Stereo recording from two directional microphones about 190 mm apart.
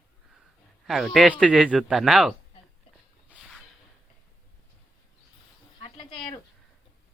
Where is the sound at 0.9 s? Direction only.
Centre (ahead or behind).